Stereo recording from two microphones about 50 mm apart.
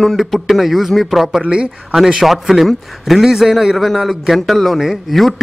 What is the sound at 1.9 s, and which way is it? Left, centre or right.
Speech, centre.